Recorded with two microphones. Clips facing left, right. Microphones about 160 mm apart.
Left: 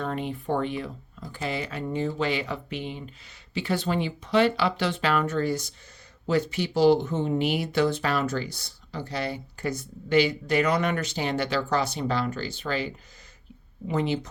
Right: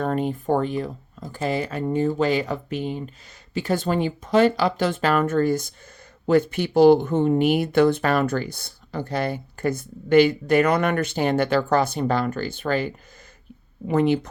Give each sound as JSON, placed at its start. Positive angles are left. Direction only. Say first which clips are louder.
{"t": 0.0, "sound": "speech", "louder": "right 6 dB", "side_deg": -45}